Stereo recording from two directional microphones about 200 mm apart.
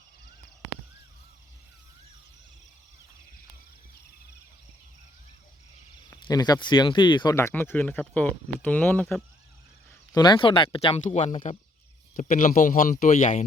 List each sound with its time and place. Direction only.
6.1 s speech: 20° left (ahead or behind)
10.2 s a man's voice: 20° left (ahead or behind); by 13.4 s 40° left (ahead or behind)